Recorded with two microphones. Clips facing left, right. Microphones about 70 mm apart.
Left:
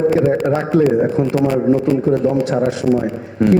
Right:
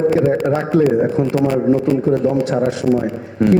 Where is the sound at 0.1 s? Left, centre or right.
Left.